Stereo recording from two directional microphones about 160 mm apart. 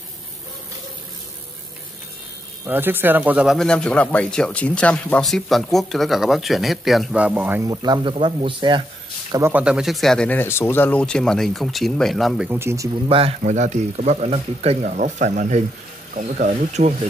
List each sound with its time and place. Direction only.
2.6 s speech: 15° right (ahead or behind); by 8.8 s 30° right (ahead or behind)
9.3 s speech: 15° right (ahead or behind)
12.5 s speech: 15° right (ahead or behind)
13.4 s speech: 50° right (ahead or behind)